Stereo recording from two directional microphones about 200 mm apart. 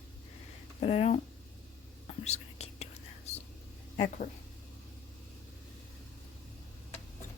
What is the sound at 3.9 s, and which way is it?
Speech, 35° left (ahead or behind).